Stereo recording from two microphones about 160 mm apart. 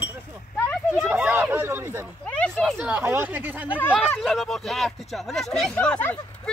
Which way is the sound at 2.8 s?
10° right (ahead or behind).